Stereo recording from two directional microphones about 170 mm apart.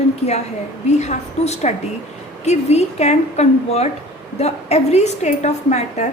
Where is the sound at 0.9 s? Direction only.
40° left (ahead or behind).